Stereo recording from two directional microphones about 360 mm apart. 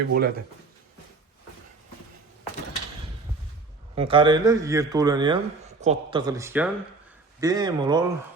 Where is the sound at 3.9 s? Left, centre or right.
Centre.